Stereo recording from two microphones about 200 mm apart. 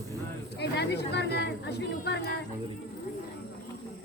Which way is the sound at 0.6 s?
55° left (ahead or behind).